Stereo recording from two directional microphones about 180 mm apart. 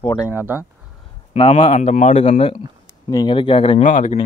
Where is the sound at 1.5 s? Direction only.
40° left (ahead or behind).